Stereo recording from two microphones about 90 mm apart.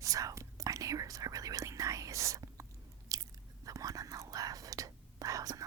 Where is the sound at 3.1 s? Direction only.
40° right (ahead or behind).